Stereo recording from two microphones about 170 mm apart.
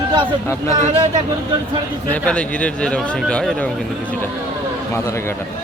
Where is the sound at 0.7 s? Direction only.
45° right (ahead or behind).